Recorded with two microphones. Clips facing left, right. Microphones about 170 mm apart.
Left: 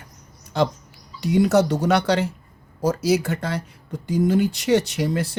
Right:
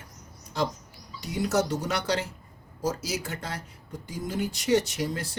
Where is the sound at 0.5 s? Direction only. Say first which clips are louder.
Left 7 dB; 65° left (ahead or behind).